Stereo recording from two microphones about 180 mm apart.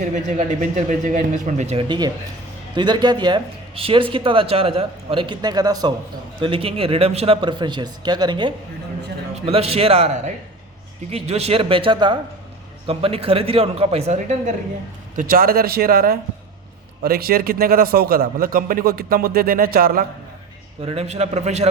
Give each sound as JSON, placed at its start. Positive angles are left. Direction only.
{"t": 0.0, "sound": "a man's voice", "side_deg": -45}
{"t": 15.1, "sound": "a man's voice", "side_deg": -50}
{"t": 20.8, "sound": "a man's voice", "side_deg": -35}